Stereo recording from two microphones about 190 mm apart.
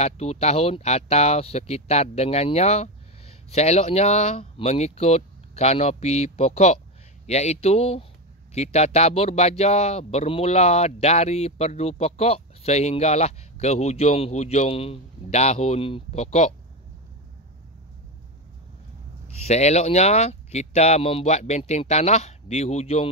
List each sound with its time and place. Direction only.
0.0 s speech: 35° left (ahead or behind)
19.4 s speech: 35° left (ahead or behind)